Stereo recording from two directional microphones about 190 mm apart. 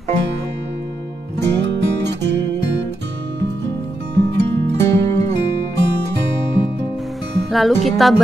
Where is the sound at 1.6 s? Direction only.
65° right (ahead or behind).